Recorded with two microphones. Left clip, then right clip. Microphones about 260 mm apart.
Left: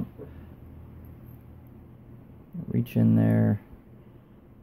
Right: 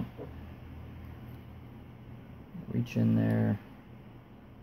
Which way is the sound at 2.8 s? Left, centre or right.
Left.